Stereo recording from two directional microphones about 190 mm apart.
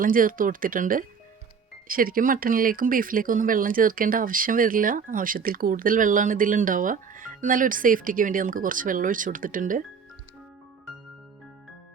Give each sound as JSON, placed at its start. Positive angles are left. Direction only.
{"t": 0.0, "sound": "speech", "side_deg": -45}